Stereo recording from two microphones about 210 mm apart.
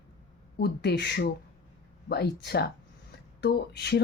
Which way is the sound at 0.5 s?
50° left (ahead or behind).